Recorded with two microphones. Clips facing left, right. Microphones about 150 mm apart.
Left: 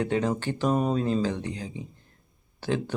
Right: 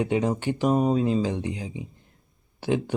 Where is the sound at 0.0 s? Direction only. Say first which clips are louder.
Right 2 dB; 15° right (ahead or behind).